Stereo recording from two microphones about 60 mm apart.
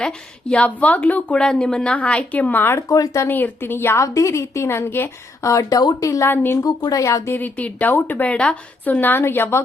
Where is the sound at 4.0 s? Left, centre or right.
Left.